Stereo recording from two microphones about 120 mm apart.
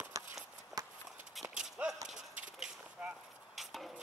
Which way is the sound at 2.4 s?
10° right (ahead or behind).